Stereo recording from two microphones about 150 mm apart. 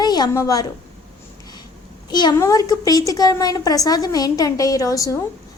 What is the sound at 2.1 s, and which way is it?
A woman's voice, 30° left (ahead or behind).